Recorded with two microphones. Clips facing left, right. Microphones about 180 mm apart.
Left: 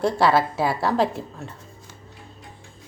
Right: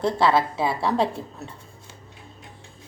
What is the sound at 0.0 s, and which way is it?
A woman's voice, 5° left (ahead or behind).